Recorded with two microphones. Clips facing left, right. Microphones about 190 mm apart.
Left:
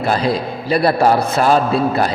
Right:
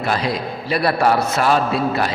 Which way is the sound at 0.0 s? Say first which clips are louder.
Left 4 dB; 35° left (ahead or behind).